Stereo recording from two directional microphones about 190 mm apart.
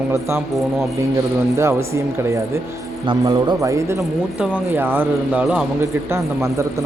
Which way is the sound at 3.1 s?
20° right (ahead or behind).